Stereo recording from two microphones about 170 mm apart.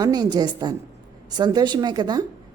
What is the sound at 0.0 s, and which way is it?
A woman's voice, 25° right (ahead or behind).